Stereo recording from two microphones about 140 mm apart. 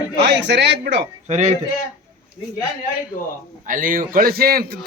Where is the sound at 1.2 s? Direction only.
55° right (ahead or behind).